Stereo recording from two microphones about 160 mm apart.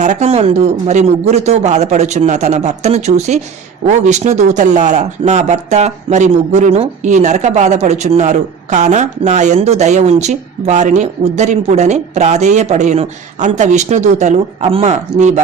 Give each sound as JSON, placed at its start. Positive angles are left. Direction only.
{"t": 0.0, "sound": "speech", "side_deg": -45}